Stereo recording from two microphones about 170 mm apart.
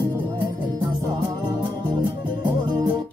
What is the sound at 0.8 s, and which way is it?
Music, 25° right (ahead or behind).